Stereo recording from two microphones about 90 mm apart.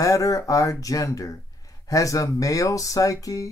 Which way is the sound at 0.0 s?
40° left (ahead or behind).